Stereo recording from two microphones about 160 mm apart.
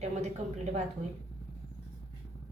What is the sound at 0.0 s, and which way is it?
Speech, 45° right (ahead or behind).